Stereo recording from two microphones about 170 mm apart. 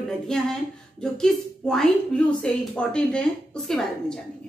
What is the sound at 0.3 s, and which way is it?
Speech, 5° left (ahead or behind).